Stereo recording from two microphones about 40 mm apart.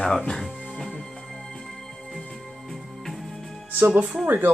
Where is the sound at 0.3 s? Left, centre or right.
Centre.